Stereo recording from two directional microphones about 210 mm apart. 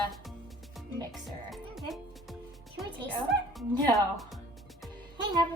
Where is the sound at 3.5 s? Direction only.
Centre (ahead or behind).